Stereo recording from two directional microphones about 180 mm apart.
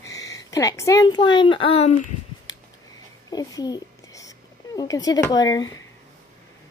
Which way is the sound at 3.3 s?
20° left (ahead or behind).